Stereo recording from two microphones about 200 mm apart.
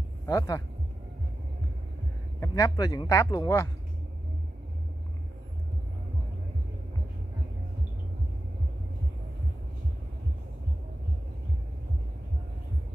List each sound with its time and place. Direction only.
0.3 s speech: 15° left (ahead or behind)
2.4 s speech: 15° left (ahead or behind)